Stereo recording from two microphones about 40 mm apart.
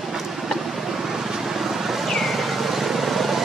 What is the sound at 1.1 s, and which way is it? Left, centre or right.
Vehicle, centre.